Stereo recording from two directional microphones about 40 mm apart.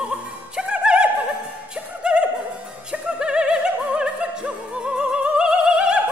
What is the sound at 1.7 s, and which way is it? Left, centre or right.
Music, right.